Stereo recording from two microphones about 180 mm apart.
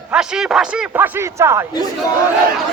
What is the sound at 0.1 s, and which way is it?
A man's voice, 5° right (ahead or behind).